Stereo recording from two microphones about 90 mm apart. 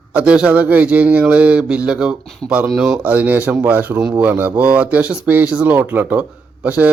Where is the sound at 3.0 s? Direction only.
20° right (ahead or behind).